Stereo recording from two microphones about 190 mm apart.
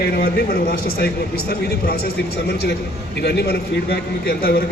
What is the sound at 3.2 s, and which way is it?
A man's voice, 55° left (ahead or behind).